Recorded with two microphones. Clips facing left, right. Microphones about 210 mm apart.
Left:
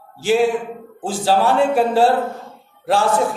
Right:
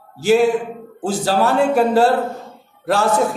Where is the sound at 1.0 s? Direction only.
40° right (ahead or behind).